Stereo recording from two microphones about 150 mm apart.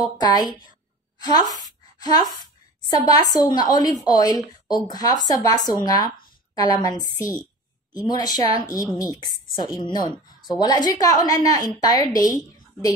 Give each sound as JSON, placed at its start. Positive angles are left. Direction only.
{"t": 0.0, "sound": "a woman's voice", "side_deg": 25}
{"t": 1.5, "sound": "a sound", "side_deg": 25}
{"t": 2.4, "sound": "a woman's voice", "side_deg": 25}